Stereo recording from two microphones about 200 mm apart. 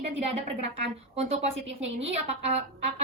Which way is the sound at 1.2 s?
30° right (ahead or behind).